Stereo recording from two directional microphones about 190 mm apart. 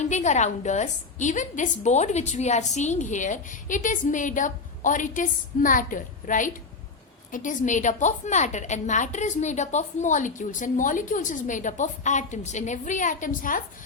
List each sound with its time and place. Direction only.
0.0 s a woman's voice: 40° left (ahead or behind)